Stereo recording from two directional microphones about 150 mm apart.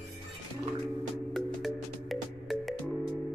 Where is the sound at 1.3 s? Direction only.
Centre (ahead or behind).